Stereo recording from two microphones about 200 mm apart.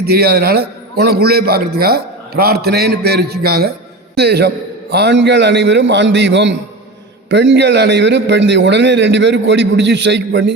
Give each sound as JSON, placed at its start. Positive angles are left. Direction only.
{"t": 0.0, "sound": "a man's voice", "side_deg": -55}